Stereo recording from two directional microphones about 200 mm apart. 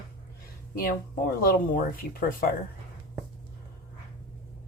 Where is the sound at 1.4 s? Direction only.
45° left (ahead or behind).